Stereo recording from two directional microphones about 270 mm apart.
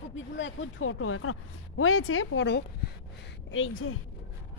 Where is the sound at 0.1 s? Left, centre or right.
Left.